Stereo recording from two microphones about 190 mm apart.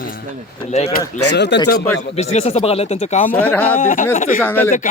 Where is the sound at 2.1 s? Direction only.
35° left (ahead or behind).